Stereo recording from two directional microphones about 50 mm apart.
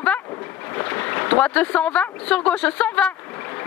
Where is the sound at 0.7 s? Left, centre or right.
Left.